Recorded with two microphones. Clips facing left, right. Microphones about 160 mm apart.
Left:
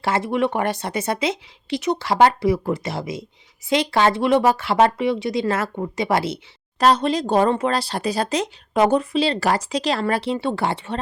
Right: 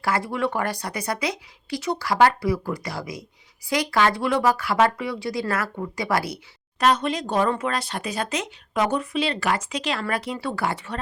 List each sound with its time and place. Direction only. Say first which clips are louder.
0.0 s speech: left 4 dB; 25° left (ahead or behind)